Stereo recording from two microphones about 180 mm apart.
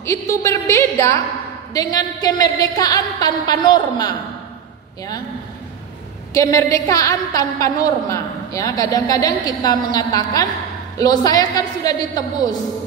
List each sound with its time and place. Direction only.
0.0 s a woman's voice: 15° left (ahead or behind)
6.3 s a woman's voice: 20° left (ahead or behind)